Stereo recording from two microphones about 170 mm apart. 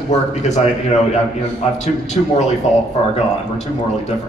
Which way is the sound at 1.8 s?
40° left (ahead or behind).